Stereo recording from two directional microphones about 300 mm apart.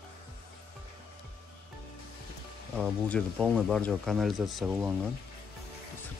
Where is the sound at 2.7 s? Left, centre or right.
Centre.